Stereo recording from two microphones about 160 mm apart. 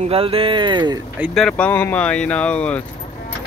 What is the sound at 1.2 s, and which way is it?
Speech, centre (ahead or behind).